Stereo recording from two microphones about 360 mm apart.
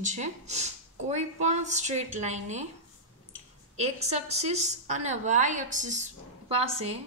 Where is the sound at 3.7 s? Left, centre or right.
Centre.